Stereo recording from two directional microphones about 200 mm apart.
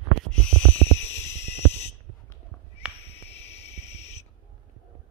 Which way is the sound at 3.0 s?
30° left (ahead or behind).